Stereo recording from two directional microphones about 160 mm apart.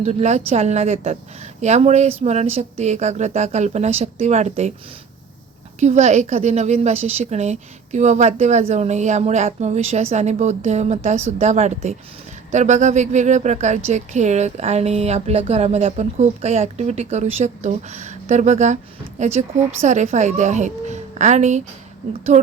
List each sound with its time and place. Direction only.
0.0 s a woman's voice: 45° right (ahead or behind)
5.8 s a woman's voice: 45° right (ahead or behind)